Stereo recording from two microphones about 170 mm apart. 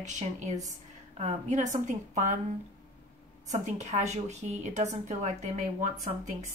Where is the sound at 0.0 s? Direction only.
45° right (ahead or behind).